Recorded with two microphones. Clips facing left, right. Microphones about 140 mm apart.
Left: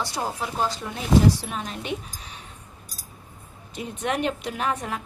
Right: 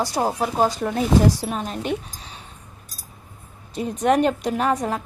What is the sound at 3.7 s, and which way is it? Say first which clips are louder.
Speech: right 8 dB; 40° right (ahead or behind).